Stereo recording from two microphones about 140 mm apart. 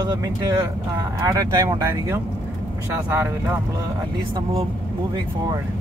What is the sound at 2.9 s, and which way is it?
Speech, 15° right (ahead or behind).